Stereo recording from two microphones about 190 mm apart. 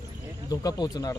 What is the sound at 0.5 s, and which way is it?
Speech, 20° left (ahead or behind).